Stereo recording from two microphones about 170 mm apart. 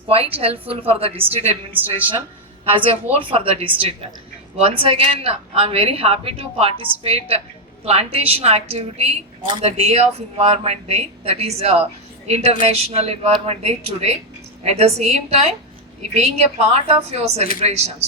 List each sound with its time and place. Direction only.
0.1 s speech: 35° right (ahead or behind)
2.6 s speech: 35° right (ahead or behind)